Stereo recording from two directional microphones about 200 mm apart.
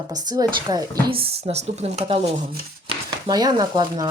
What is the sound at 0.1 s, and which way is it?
Speech, 20° right (ahead or behind).